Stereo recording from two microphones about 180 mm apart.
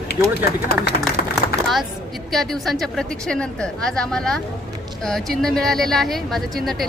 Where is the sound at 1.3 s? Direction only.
Centre (ahead or behind).